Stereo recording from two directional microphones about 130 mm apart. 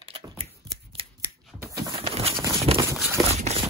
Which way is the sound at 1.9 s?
45° right (ahead or behind).